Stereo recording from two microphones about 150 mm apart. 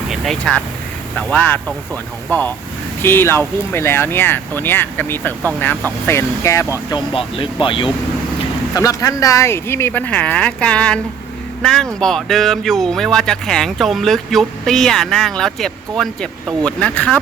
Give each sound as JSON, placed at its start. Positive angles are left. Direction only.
{"t": 0.1, "sound": "speech", "side_deg": 0}
{"t": 3.0, "sound": "speech", "side_deg": 15}
{"t": 6.9, "sound": "speech", "side_deg": 35}
{"t": 8.7, "sound": "speech", "side_deg": 20}